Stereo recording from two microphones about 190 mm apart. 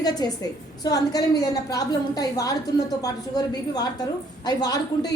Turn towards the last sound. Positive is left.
turn(degrees=20)  # may be behind; listen again after turning